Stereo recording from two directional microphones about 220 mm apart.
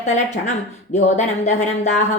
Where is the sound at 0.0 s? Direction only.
30° left (ahead or behind).